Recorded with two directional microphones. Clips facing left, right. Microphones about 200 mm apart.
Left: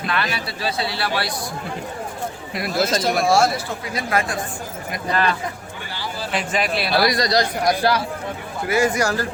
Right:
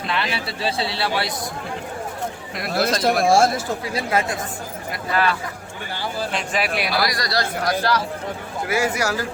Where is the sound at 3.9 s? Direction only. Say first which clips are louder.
Even; 25° right (ahead or behind).